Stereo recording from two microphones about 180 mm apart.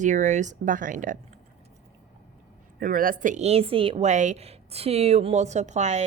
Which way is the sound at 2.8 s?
50° right (ahead or behind).